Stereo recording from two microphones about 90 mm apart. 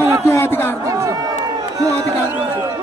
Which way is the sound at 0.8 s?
35° right (ahead or behind).